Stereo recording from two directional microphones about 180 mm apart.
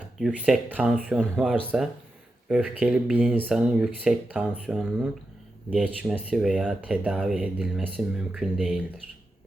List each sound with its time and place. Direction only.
0.2 s speech: 5° right (ahead or behind)